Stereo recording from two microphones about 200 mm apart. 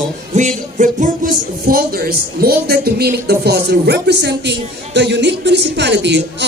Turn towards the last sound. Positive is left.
turn(degrees=-60)  # may be behind; listen again after turning